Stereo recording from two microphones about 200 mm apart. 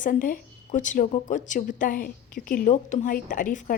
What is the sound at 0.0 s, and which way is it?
A woman's voice, 40° left (ahead or behind).